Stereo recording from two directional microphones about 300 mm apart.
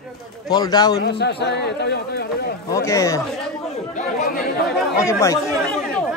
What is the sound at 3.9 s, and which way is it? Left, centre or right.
Speech, left.